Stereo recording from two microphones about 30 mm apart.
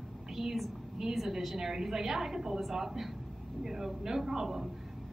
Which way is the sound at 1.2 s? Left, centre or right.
Centre.